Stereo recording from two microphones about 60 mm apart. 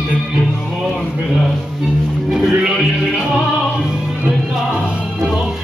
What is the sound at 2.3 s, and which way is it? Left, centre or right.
Music, centre.